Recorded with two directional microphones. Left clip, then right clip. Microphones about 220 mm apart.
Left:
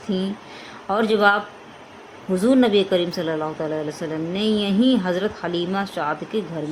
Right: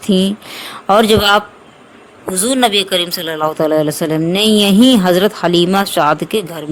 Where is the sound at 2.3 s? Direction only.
50° right (ahead or behind).